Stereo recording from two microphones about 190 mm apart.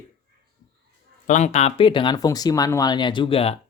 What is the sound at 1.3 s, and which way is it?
Speech, 35° left (ahead or behind).